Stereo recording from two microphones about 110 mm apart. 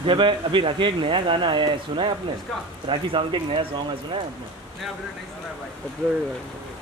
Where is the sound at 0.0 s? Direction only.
50° right (ahead or behind).